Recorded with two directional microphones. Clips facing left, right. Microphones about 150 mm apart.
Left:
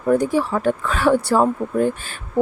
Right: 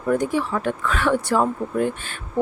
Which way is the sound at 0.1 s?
35° left (ahead or behind).